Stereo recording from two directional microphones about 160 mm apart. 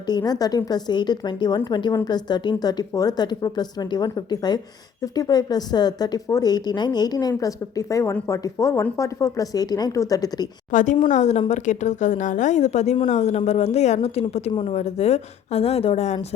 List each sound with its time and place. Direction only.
0.1 s a woman's voice: 25° left (ahead or behind)
10.7 s a woman's voice: 55° left (ahead or behind)